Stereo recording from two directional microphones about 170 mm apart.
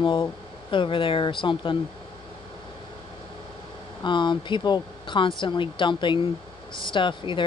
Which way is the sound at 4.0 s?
25° left (ahead or behind).